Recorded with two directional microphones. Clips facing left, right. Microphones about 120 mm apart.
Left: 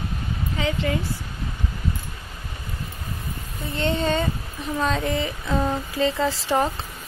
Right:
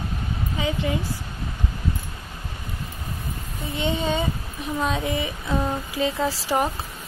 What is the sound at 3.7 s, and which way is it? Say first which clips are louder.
Speech: left 2 dB; 10° right (ahead or behind).